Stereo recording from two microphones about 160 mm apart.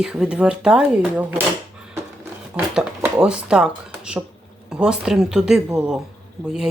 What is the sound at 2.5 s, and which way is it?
Speech, 5° right (ahead or behind).